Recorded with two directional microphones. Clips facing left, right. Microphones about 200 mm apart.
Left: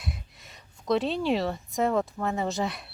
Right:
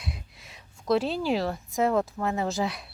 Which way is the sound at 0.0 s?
Centre (ahead or behind).